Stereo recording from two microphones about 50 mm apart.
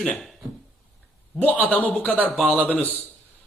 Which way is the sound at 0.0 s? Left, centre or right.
Centre.